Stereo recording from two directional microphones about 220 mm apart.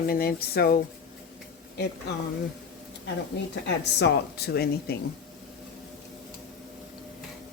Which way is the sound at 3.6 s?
50° left (ahead or behind).